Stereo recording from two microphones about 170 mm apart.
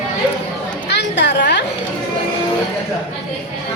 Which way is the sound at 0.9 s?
90° left.